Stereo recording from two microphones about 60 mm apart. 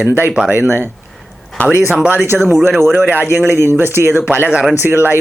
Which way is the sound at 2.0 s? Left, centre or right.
Right.